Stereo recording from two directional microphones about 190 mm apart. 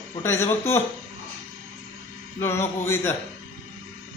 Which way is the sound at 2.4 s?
15° left (ahead or behind).